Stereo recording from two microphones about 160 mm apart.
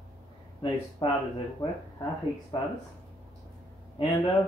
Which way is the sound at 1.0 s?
35° left (ahead or behind).